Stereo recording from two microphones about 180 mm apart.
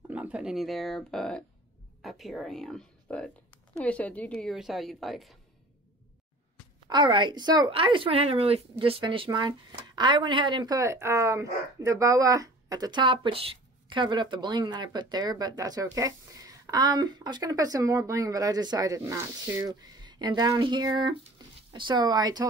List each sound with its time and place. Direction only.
0.1 s a woman's voice: 5° right (ahead or behind)
6.9 s speech: 25° right (ahead or behind)